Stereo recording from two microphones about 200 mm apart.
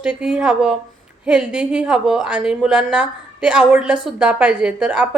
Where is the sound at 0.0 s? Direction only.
5° right (ahead or behind).